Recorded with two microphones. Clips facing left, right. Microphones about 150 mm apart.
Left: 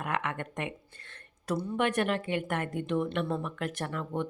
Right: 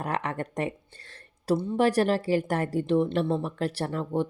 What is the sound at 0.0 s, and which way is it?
A woman's voice, 35° right (ahead or behind).